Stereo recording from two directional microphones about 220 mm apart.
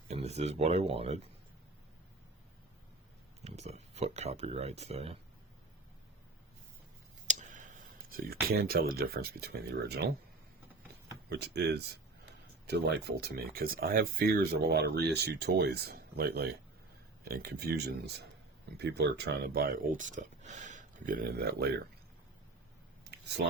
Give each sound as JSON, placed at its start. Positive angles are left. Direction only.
{"t": 0.1, "sound": "speech", "side_deg": -30}
{"t": 3.4, "sound": "speech", "side_deg": -30}
{"t": 7.3, "sound": "a sound", "side_deg": -35}
{"t": 8.1, "sound": "speech", "side_deg": -45}
{"t": 11.3, "sound": "speech", "side_deg": -50}
{"t": 23.1, "sound": "a sound", "side_deg": -50}